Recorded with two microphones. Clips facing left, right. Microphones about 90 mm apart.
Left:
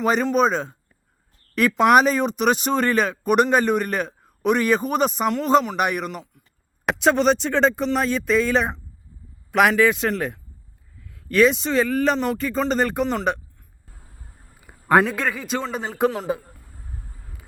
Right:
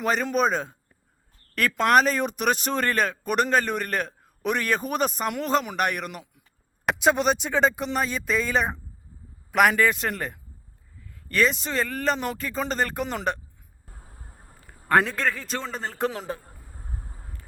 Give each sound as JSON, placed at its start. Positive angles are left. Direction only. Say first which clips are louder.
{"t": 0.0, "sound": "a man's voice", "louder": "left 4 dB", "side_deg": 0}
{"t": 14.6, "sound": "a man's voice", "louder": "left 4 dB", "side_deg": 10}
{"t": 16.7, "sound": "a sound", "louder": "right 2 dB", "side_deg": -35}